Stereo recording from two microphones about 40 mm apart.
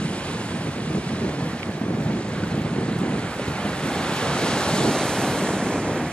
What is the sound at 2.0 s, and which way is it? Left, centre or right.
Wind noise, left.